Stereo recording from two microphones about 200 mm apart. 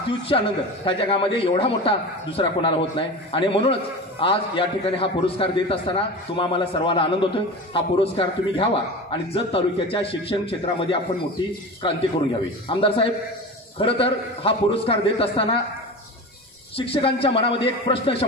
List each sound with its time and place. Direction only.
0.3 s a man's voice: 25° left (ahead or behind)
16.7 s a man's voice: 30° left (ahead or behind)